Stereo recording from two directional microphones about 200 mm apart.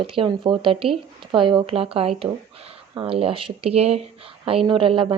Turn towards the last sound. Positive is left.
turn(degrees=-25)  # may be behind; listen again after turning